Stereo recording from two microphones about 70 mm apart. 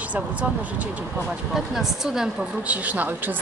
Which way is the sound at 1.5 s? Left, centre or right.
Centre.